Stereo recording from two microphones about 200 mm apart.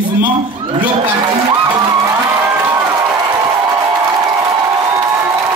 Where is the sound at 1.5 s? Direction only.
20° right (ahead or behind).